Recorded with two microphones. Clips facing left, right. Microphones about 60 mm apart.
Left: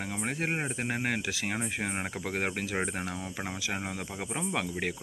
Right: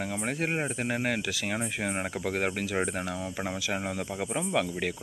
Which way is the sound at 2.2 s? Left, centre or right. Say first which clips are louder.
Right 3 dB; centre.